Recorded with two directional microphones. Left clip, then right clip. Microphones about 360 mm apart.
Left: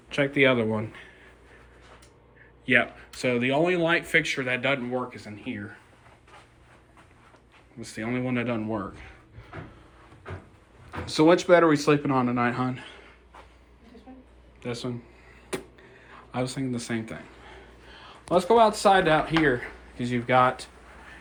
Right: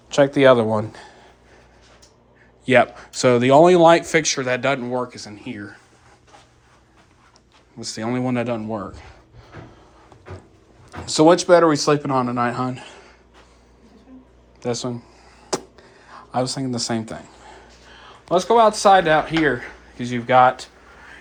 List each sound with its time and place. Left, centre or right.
2.6 s speech: centre
7.8 s speech: centre
11.0 s speech: centre
14.6 s speech: centre
15.5 s a sound: centre
18.8 s speech: centre